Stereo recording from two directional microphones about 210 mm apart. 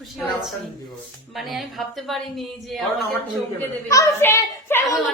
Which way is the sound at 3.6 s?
15° left (ahead or behind).